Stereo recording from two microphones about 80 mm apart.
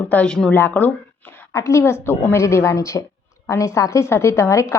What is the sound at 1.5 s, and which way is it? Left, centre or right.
A woman's voice, left.